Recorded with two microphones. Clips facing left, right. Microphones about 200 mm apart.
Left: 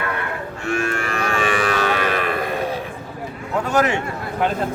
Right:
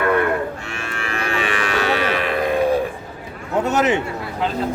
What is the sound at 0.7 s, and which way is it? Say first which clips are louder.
Livestock: left 6 dB; 45° left (ahead or behind).